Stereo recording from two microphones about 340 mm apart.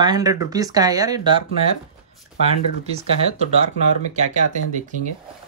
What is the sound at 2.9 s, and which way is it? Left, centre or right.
Speech, centre.